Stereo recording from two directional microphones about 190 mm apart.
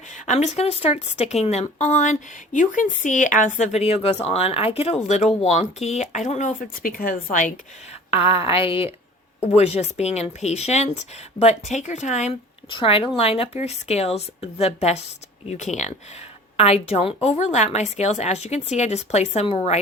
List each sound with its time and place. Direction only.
0.1 s speech: 35° left (ahead or behind)
8.1 s speech: 30° left (ahead or behind)
12.7 s speech: 30° left (ahead or behind)